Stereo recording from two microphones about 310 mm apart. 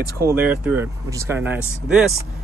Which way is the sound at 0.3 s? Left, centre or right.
Centre.